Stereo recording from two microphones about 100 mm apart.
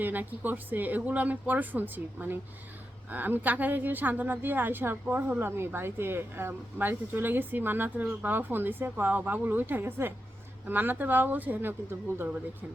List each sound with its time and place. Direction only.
0.0 s speech: 20° right (ahead or behind)
5.4 s speech: 25° right (ahead or behind)